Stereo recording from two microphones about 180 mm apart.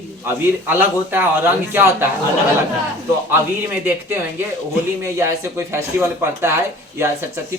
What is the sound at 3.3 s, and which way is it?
Speech, 10° right (ahead or behind).